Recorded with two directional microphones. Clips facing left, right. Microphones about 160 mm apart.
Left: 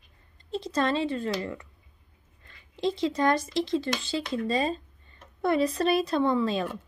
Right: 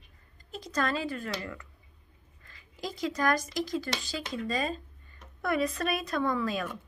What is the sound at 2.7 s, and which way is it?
A woman's voice, 25° left (ahead or behind).